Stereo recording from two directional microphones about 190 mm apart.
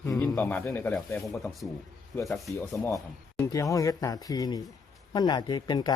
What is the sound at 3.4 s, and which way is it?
Speech, 15° left (ahead or behind).